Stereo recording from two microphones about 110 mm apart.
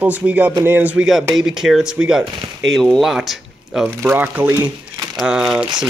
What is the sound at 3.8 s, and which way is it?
Speech, 15° right (ahead or behind).